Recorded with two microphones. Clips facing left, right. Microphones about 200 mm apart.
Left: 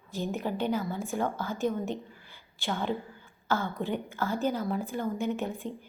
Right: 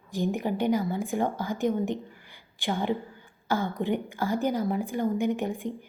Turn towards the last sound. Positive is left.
turn(degrees=-15)  # may be behind; listen again after turning